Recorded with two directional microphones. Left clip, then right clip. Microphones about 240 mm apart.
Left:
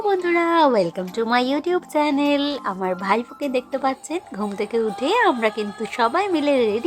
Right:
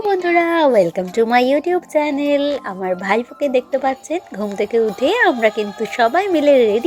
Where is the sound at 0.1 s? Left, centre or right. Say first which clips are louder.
Right 4 dB; centre.